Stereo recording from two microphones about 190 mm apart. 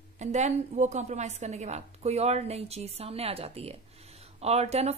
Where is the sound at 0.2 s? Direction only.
35° right (ahead or behind).